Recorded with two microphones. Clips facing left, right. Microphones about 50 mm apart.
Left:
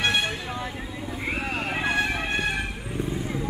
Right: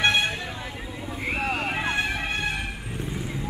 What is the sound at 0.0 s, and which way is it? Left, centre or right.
Vehicle, right.